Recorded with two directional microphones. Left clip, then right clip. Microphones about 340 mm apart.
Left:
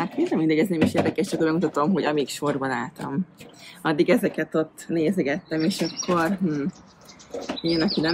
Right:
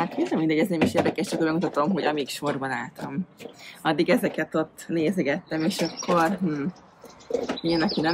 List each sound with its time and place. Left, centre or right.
0.3 s speech: centre